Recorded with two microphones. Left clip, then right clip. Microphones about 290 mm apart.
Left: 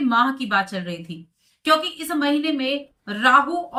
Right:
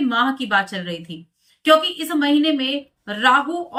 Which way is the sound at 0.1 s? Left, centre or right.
Right.